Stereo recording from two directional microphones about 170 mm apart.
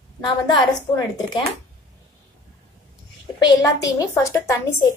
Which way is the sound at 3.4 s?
20° left (ahead or behind).